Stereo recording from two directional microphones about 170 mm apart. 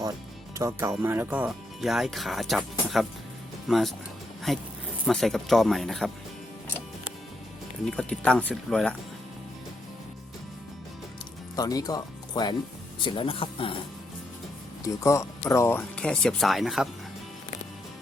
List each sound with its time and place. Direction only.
0.5 s speech: 15° right (ahead or behind); by 6.1 s centre (ahead or behind)
7.9 s speech: 5° left (ahead or behind)
11.5 s speech: 20° left (ahead or behind)
14.8 s speech: 15° left (ahead or behind); by 16.9 s centre (ahead or behind)